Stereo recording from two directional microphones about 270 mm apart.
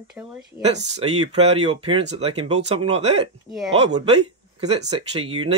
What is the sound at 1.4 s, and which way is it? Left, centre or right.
Speech, right.